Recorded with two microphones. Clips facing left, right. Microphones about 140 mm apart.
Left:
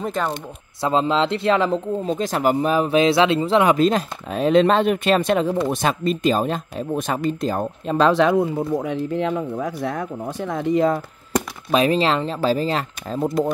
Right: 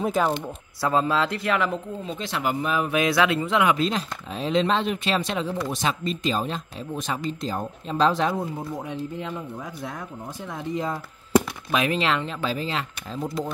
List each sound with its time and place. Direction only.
0.0 s speech: 5° right (ahead or behind)
0.7 s speech: 20° left (ahead or behind); by 8.4 s 70° left (ahead or behind)
8.8 s speech: 90° left; by 11.0 s 70° left (ahead or behind)
11.7 s speech: 35° left (ahead or behind)
13.2 s speech: 50° left (ahead or behind)